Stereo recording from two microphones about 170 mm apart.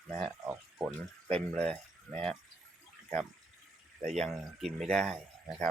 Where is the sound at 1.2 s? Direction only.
5° left (ahead or behind).